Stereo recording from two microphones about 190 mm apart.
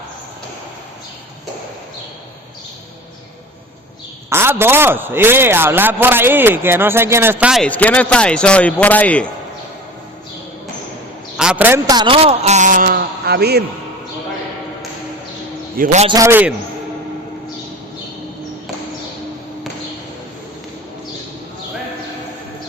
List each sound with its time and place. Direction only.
4.3 s a man's voice: 10° right (ahead or behind); by 9.3 s 5° left (ahead or behind)
11.3 s a sound: 5° right (ahead or behind)
11.9 s a man's voice: 25° right (ahead or behind); by 13.7 s 60° right (ahead or behind)
15.8 s a man's voice: 40° right (ahead or behind)
16.0 s a man's voice: 15° right (ahead or behind)